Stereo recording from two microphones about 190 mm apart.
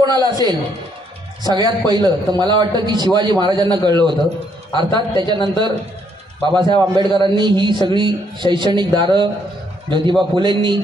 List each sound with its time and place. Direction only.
0.0 s a man's voice: 20° right (ahead or behind)
6.5 s a man's voice: 25° right (ahead or behind)